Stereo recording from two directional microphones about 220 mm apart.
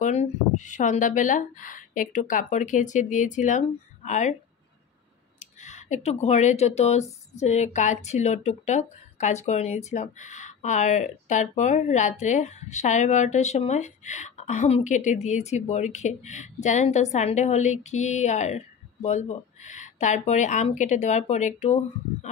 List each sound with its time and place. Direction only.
0.0 s speech: 30° left (ahead or behind)
5.4 s speech: 35° left (ahead or behind)